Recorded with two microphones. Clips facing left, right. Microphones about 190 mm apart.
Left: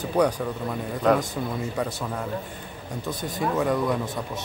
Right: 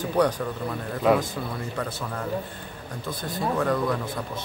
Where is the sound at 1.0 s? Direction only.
5° right (ahead or behind).